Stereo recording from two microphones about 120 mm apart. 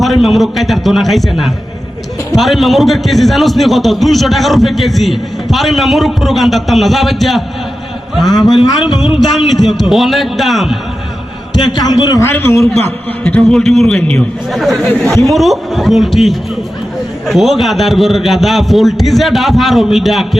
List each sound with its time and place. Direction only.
0.0 s a man's voice: centre (ahead or behind)
9.0 s a man's voice: 5° right (ahead or behind)
11.7 s a man's voice: 35° left (ahead or behind)
12.2 s a man's voice: 20° left (ahead or behind)
13.5 s a man's voice: centre (ahead or behind)